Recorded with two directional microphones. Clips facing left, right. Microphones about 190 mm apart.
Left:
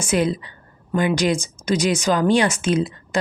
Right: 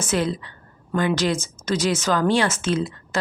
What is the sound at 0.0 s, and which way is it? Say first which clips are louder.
Speech: left 3 dB; 15° left (ahead or behind).